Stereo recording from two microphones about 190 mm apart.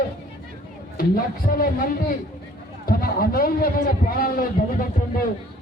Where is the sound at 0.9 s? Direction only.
50° left (ahead or behind).